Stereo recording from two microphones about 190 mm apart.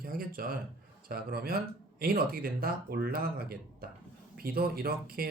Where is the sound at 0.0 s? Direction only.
50° right (ahead or behind).